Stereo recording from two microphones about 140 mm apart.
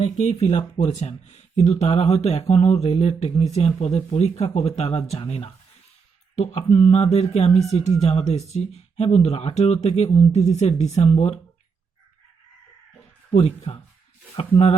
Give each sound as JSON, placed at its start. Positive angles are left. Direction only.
{"t": 0.0, "sound": "speech", "side_deg": 45}
{"t": 13.3, "sound": "speech", "side_deg": 50}